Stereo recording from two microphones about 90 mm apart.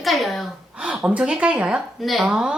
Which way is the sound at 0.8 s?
15° right (ahead or behind).